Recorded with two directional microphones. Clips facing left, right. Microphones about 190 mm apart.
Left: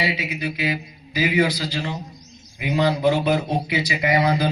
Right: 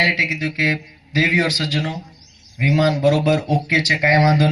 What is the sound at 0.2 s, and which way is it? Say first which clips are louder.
A man's voice: right 3 dB; 90° right.